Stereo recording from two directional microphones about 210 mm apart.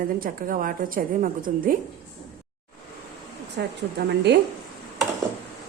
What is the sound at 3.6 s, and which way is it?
Speech, 55° right (ahead or behind).